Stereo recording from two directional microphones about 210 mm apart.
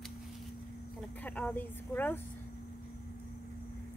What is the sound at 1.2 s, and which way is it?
Speech, 5° left (ahead or behind).